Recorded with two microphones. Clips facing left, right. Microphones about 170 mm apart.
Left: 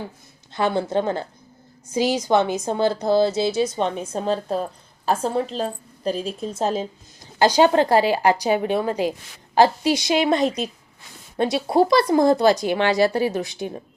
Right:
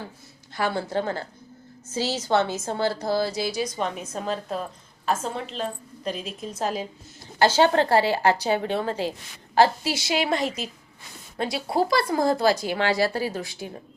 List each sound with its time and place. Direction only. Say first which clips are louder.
0.5 s a woman's voice: left 5 dB; 20° left (ahead or behind)
7.3 s a woman's voice: left 3 dB; 15° left (ahead or behind)